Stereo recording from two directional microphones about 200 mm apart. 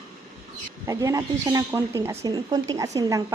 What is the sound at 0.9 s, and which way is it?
A woman's voice, 15° right (ahead or behind).